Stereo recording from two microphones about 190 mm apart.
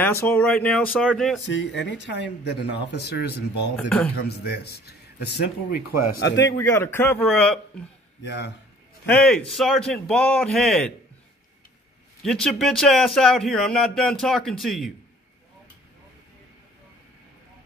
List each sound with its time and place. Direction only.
0.0 s speech: 10° left (ahead or behind)
1.4 s speech: 70° left (ahead or behind)
3.7 s a man's voice: 5° left (ahead or behind)
4.2 s speech: 60° left (ahead or behind)
6.6 s a man's voice: 15° left (ahead or behind)
8.2 s speech: 60° left (ahead or behind)
9.0 s a man's voice: 5° left (ahead or behind)
12.2 s a man's voice: centre (ahead or behind)